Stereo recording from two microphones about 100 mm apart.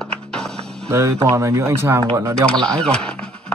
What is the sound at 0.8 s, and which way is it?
Speech, 30° right (ahead or behind).